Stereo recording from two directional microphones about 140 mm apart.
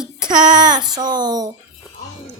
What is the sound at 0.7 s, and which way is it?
Speech, 30° right (ahead or behind).